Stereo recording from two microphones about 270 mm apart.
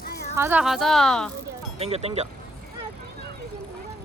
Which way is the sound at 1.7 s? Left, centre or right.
Right.